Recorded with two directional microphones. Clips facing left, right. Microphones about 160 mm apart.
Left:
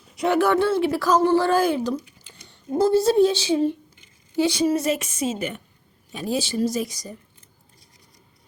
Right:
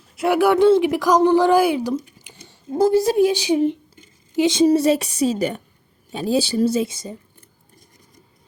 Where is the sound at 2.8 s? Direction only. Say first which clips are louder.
Right 1 dB; 15° right (ahead or behind).